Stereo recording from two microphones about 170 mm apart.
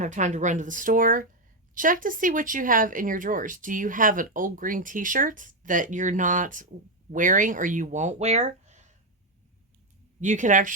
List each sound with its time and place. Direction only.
0.0 s speech: 45° right (ahead or behind)
10.2 s speech: 45° right (ahead or behind)